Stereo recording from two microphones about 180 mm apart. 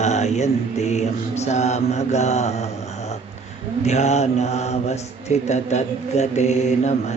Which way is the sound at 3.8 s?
40° left (ahead or behind).